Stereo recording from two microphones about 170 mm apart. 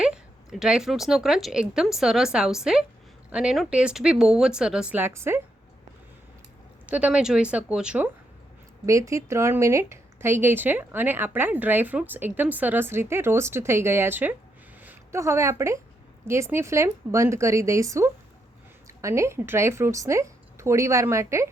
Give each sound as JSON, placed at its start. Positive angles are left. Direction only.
{"t": 0.0, "sound": "a woman's voice", "side_deg": -5}
{"t": 6.8, "sound": "a woman's voice", "side_deg": -5}
{"t": 8.9, "sound": "a woman's voice", "side_deg": -20}